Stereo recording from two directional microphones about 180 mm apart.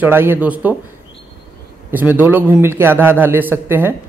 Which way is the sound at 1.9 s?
10° right (ahead or behind).